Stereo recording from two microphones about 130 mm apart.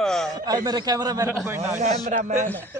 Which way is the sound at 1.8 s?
70° right (ahead or behind).